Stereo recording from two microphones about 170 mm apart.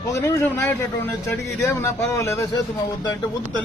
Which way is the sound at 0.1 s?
15° left (ahead or behind).